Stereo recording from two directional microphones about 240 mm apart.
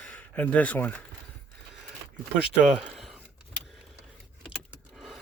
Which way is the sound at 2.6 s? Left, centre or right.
Centre.